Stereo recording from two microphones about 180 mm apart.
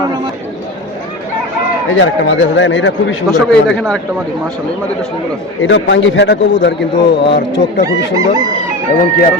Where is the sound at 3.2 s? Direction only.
Centre (ahead or behind).